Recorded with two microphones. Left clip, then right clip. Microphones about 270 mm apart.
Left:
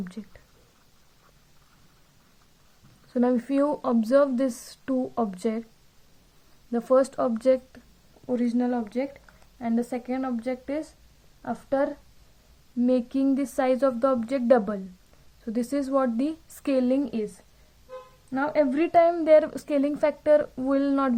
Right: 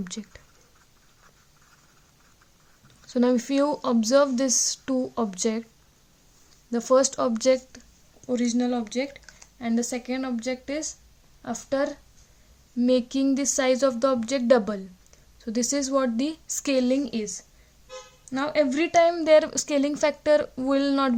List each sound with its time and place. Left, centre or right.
0.0 s speech: right
3.1 s a woman's voice: right
6.7 s a woman's voice: right